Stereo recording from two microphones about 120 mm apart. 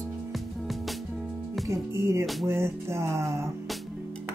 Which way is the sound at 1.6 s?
25° right (ahead or behind).